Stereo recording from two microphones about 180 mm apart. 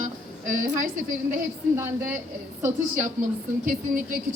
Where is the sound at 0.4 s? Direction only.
45° right (ahead or behind).